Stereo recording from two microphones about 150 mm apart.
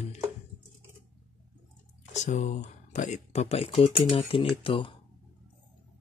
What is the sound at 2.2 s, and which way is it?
Speech, 55° left (ahead or behind).